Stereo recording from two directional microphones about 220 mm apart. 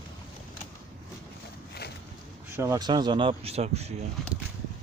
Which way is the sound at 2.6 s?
15° right (ahead or behind).